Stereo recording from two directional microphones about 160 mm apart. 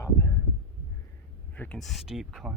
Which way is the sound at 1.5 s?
10° left (ahead or behind).